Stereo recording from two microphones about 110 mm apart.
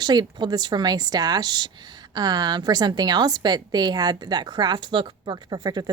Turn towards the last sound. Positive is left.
turn(degrees=-40)  # may be behind; listen again after turning